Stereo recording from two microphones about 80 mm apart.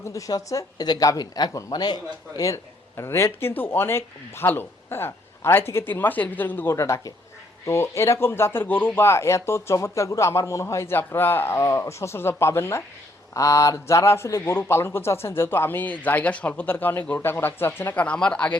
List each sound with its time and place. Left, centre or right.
0.0 s speech: left
6.7 s speech: left
10.9 s speech: left
17.9 s speech: centre